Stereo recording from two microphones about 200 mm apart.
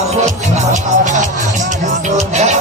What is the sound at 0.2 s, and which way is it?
Music, 35° right (ahead or behind).